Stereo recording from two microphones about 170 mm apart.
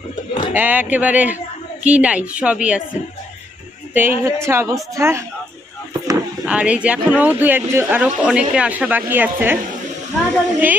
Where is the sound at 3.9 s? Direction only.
10° right (ahead or behind).